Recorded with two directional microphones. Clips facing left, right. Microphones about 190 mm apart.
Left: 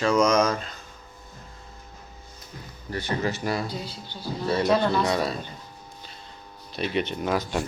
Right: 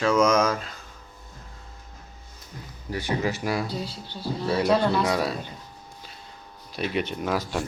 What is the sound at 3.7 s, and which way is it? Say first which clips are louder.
Speech: right 2 dB; 35° right (ahead or behind).